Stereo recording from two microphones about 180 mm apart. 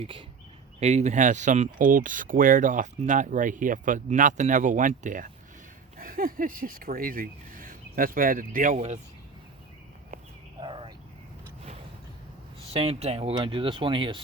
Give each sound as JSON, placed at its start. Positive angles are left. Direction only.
{"t": 0.0, "sound": "speech", "side_deg": -30}
{"t": 10.6, "sound": "bird", "side_deg": -25}
{"t": 12.7, "sound": "speech", "side_deg": -35}